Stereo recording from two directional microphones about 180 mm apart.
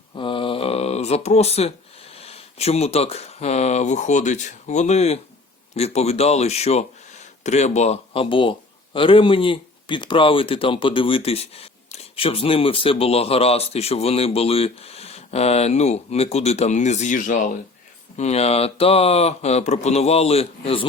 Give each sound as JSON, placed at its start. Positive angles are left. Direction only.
{"t": 0.1, "sound": "a sound", "side_deg": 30}
{"t": 2.1, "sound": "a man's voice", "side_deg": 35}
{"t": 18.2, "sound": "a man's voice", "side_deg": 35}